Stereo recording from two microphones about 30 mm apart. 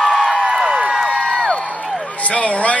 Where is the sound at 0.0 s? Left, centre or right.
Centre.